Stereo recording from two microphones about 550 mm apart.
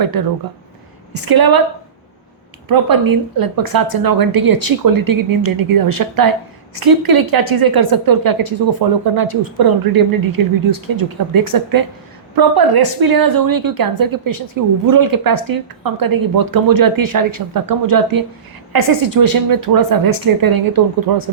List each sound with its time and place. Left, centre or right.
0.0 s a woman's voice: right
2.6 s a woman's voice: right